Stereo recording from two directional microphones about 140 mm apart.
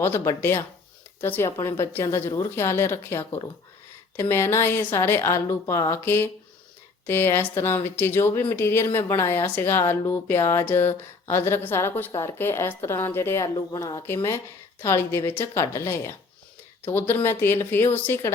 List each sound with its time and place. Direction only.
0.0 s speech: 15° left (ahead or behind)